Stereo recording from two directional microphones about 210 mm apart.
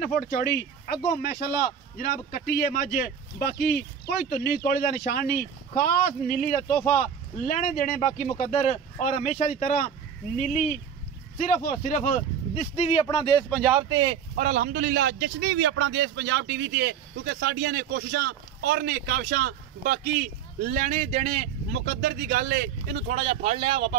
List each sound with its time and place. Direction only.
0.0 s speech: 40° left (ahead or behind)
13.0 s speech: 20° left (ahead or behind)
13.5 s speech: centre (ahead or behind)
13.7 s speech: 20° right (ahead or behind)
14.3 s a man's voice: 40° right (ahead or behind)
21.8 s a man's voice: 45° right (ahead or behind)
23.0 s speech: 30° right (ahead or behind)